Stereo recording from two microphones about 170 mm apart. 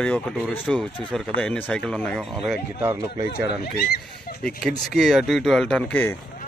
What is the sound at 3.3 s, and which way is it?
Speech, 65° left (ahead or behind).